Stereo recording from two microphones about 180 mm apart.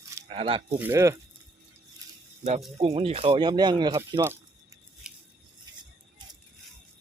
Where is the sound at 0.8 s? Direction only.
15° right (ahead or behind).